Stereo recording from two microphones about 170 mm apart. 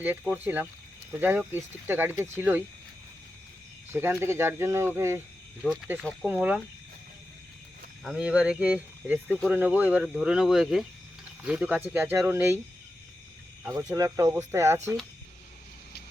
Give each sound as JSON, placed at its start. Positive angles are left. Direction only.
{"t": 0.0, "sound": "speech", "side_deg": -10}
{"t": 3.9, "sound": "speech", "side_deg": -15}
{"t": 6.2, "sound": "speech", "side_deg": -10}
{"t": 8.0, "sound": "speech", "side_deg": -5}
{"t": 9.2, "sound": "speech", "side_deg": 5}
{"t": 9.5, "sound": "speech", "side_deg": -10}
{"t": 13.9, "sound": "speech", "side_deg": -20}